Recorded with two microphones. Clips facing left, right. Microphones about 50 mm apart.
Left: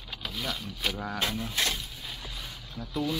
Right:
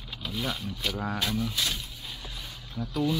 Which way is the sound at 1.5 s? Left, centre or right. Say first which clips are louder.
Left 1 dB; left.